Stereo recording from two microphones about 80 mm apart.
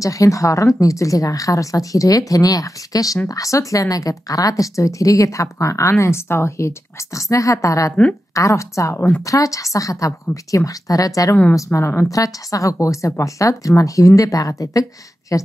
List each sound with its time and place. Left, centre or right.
0.0 s speech: left
7.2 s speech: left
8.9 s a woman's voice: left
9.2 s speech: left
11.5 s speech: left
12.1 s speech: left